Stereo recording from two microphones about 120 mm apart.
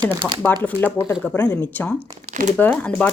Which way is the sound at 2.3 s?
80° right.